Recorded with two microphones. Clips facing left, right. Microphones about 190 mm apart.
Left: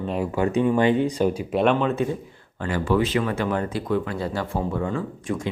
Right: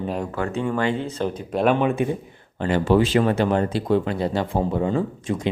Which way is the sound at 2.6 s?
25° right (ahead or behind).